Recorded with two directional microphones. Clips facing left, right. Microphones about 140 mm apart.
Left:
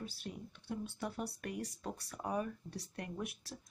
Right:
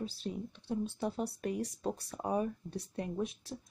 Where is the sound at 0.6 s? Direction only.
25° right (ahead or behind).